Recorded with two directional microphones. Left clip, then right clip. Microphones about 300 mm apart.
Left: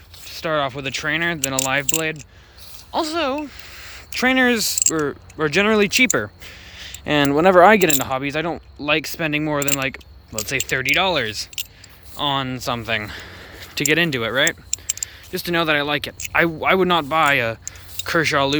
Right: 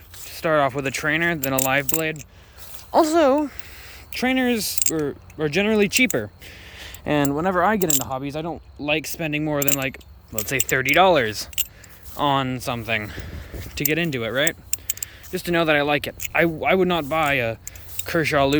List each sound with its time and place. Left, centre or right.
0.3 s speech: centre
2.9 s speech: centre
3.6 s speech: centre
7.3 s speech: centre
8.0 s speech: centre
14.7 s a sound: centre
15.3 s speech: centre